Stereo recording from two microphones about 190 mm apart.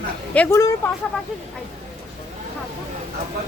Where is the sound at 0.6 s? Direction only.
20° left (ahead or behind).